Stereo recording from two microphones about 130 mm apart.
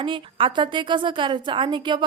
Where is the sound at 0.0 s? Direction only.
40° right (ahead or behind).